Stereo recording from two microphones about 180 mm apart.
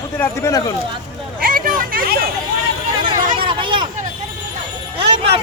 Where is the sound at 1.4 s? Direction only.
50° right (ahead or behind).